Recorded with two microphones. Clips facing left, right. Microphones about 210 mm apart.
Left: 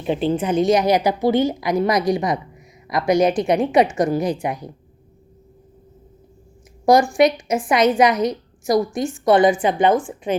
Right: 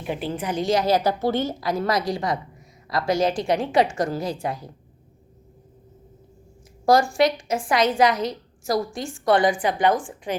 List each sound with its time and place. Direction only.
0.0 s a woman's voice: 25° left (ahead or behind)
6.8 s a woman's voice: 15° left (ahead or behind)